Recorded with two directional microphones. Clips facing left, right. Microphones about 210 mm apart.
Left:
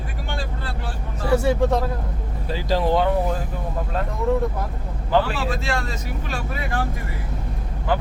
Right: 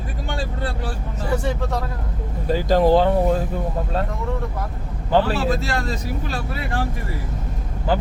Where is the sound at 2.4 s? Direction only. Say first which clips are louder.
Right 5 dB; 45° right (ahead or behind).